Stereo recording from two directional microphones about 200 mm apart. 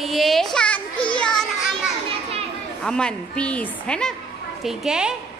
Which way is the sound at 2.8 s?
5° left (ahead or behind).